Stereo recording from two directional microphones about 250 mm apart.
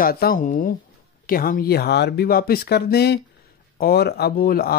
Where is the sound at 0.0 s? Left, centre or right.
Left.